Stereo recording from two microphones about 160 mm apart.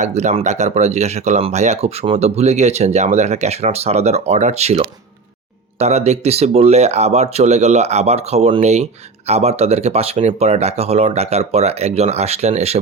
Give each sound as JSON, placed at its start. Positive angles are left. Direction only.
{"t": 0.0, "sound": "speech", "side_deg": -45}